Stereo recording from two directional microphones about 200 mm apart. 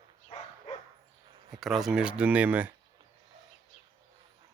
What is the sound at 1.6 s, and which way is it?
Speech, centre (ahead or behind).